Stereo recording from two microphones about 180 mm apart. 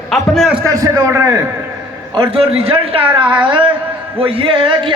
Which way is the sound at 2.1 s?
30° right (ahead or behind).